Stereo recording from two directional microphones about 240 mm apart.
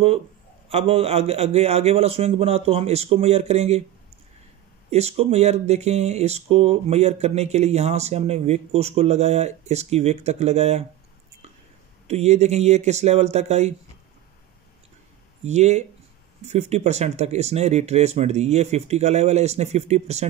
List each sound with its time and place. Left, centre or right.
0.7 s speech: right
4.9 s speech: right
12.1 s speech: right
15.4 s speech: right